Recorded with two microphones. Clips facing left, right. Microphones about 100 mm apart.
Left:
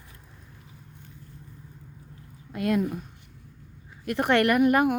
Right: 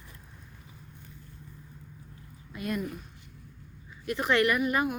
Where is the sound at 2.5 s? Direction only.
90° left.